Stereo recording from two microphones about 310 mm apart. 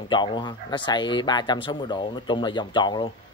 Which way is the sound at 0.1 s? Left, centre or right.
Centre.